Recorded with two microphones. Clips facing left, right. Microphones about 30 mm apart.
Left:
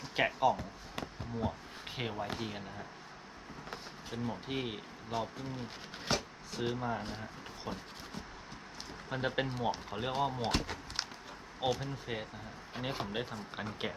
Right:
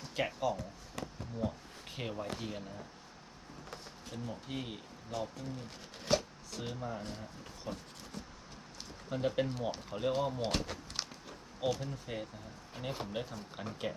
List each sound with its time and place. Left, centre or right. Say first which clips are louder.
0.2 s speech: left 5 dB; left
3.7 s speech: left 3 dB; left
6.1 s chopping: right 3 dB; centre
6.5 s speech: left 5 dB; left
9.0 s speech: right 1 dB; left
9.5 s speech: left 2 dB; centre
11.6 s speech: left 1 dB; left